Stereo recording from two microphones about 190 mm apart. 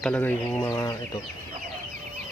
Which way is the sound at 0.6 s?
20° left (ahead or behind).